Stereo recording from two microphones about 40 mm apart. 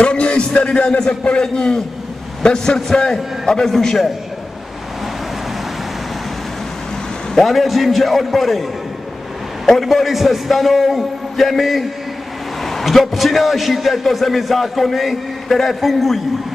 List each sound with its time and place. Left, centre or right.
0.0 s a man's voice: left; by 4.1 s centre
7.3 s a man's voice: centre
9.7 s a man's voice: centre